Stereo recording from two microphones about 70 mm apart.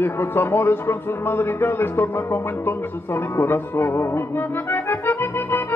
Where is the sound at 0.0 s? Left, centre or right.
Left.